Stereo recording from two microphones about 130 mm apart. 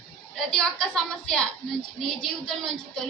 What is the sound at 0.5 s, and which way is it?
Speech, 5° left (ahead or behind).